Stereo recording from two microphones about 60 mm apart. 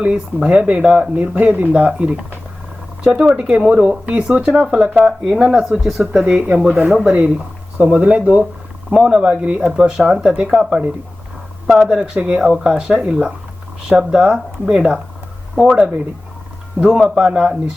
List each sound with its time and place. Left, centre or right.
0.0 s speech: centre
11.9 s speech: centre